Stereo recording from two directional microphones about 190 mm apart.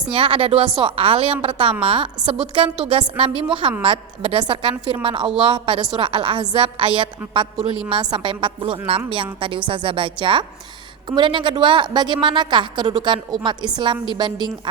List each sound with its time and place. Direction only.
0.1 s a woman's voice: 25° right (ahead or behind)